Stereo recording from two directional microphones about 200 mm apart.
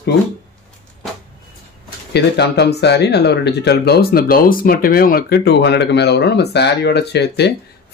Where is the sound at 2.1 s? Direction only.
55° left (ahead or behind).